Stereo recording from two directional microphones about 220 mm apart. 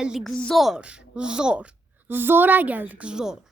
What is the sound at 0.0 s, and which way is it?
A child's voice, centre (ahead or behind).